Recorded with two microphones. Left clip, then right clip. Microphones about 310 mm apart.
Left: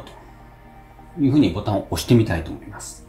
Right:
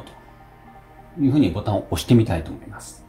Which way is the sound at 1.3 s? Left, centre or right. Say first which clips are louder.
Left 2 dB; centre.